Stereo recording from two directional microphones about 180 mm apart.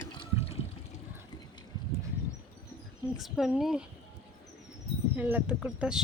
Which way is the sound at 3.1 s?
Centre (ahead or behind).